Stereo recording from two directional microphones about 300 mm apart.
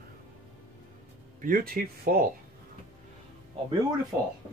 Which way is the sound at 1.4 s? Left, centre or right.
Right.